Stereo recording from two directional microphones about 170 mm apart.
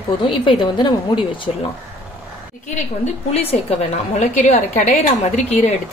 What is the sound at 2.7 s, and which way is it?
A woman's voice, 40° left (ahead or behind).